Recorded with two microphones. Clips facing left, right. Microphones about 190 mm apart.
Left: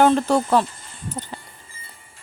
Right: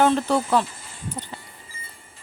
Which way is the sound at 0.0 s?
45° left (ahead or behind).